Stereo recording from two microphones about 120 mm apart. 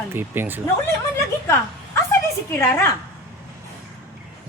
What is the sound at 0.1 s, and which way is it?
Speech, 15° right (ahead or behind).